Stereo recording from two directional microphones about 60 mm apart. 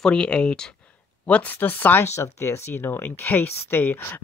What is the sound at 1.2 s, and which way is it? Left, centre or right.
Speech, left.